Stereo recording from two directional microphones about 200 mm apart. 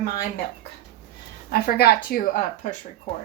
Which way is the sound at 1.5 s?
50° left (ahead or behind).